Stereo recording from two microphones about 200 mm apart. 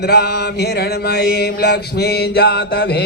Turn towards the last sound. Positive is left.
turn(degrees=55)  # may be behind; listen again after turning